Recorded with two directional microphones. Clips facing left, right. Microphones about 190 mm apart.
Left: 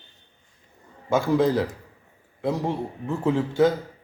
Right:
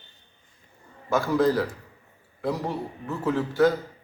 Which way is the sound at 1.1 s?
25° left (ahead or behind).